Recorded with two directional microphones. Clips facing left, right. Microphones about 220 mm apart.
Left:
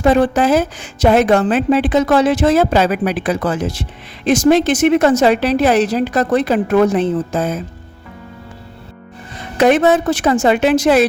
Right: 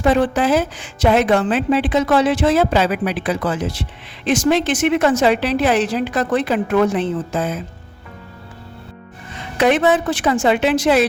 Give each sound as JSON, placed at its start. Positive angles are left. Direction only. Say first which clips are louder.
{"t": 0.0, "sound": "a woman's voice", "louder": "left 3 dB", "side_deg": 40}
{"t": 9.6, "sound": "a woman's voice", "louder": "left 3 dB", "side_deg": 45}